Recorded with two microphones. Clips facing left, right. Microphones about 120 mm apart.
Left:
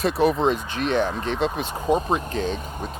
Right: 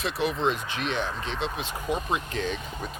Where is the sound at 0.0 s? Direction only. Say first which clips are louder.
Left 7 dB; 40° left (ahead or behind).